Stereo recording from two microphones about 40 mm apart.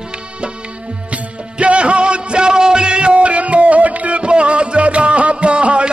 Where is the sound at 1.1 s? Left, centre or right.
Right.